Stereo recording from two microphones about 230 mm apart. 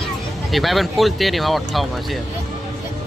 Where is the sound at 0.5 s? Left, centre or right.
Centre.